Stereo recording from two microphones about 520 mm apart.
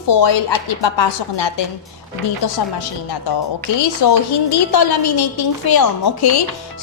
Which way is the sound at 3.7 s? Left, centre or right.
Left.